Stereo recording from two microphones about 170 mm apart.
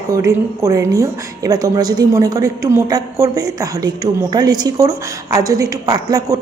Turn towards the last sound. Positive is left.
turn(degrees=-20)  # may be behind; listen again after turning